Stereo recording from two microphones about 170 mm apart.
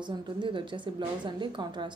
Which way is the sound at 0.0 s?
30° right (ahead or behind).